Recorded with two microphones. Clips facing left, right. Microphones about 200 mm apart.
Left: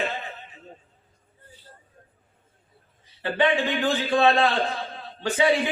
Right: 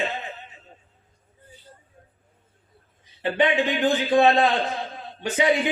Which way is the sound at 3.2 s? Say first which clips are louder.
Right 1 dB; 20° right (ahead or behind).